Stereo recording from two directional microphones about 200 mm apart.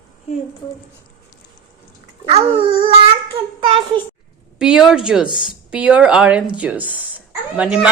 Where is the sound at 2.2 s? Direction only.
30° right (ahead or behind).